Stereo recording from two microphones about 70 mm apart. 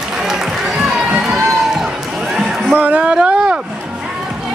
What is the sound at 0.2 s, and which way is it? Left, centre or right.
Run, centre.